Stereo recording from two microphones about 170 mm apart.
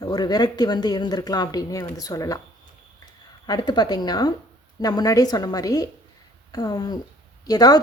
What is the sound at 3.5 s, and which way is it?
Speech, 25° left (ahead or behind).